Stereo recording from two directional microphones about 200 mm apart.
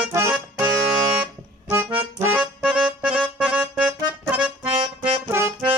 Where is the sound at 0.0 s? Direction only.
15° right (ahead or behind).